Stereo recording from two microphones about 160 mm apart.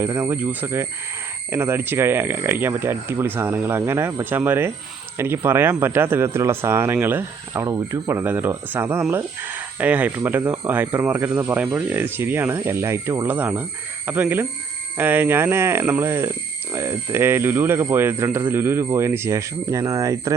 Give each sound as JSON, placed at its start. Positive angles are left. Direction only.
{"t": 0.0, "sound": "speech", "side_deg": -15}